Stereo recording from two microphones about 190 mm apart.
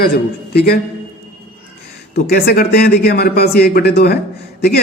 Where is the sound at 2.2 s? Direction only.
55° left (ahead or behind).